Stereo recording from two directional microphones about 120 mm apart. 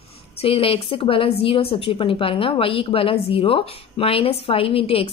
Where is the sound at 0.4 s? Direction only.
50° left (ahead or behind).